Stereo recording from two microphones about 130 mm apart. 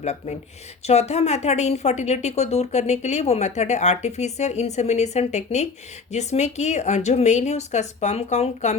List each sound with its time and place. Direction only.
0.0 s a woman's voice: 55° left (ahead or behind)